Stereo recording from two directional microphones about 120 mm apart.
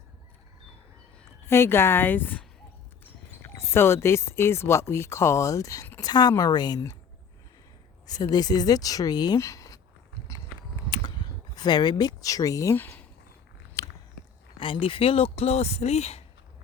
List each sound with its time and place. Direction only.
1.5 s speech: 20° left (ahead or behind)
8.0 s speech: 35° left (ahead or behind)
10.8 s a sound: 35° left (ahead or behind)
12.7 s speech: 15° left (ahead or behind)
13.8 s biting: 25° left (ahead or behind)
14.6 s speech: 45° left (ahead or behind); by 16.2 s 65° left (ahead or behind)